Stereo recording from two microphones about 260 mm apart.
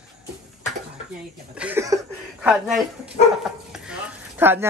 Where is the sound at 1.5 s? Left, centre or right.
Centre.